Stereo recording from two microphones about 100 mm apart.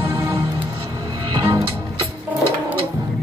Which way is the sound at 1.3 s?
40° right (ahead or behind).